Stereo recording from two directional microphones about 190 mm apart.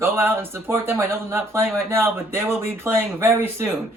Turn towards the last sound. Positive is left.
turn(degrees=-10)  # may be behind; listen again after turning